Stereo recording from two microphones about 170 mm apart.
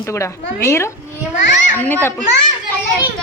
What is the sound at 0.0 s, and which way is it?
A woman's voice, 15° left (ahead or behind).